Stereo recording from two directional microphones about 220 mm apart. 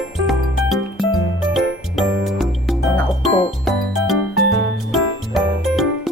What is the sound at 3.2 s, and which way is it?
Music, 25° left (ahead or behind).